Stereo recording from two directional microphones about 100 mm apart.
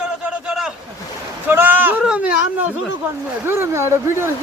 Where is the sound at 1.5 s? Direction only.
20° right (ahead or behind).